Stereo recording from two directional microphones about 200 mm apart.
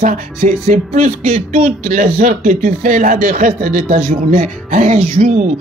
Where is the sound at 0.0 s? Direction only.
40° right (ahead or behind).